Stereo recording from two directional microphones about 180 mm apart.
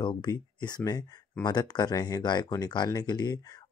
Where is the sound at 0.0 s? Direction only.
25° left (ahead or behind).